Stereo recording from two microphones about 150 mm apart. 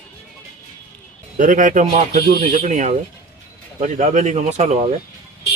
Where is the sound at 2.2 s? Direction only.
90° right.